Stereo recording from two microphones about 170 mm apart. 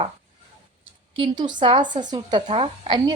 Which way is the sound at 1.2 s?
25° right (ahead or behind).